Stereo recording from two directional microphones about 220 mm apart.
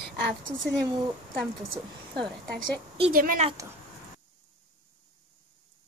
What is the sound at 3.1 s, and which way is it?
Speech, 40° right (ahead or behind).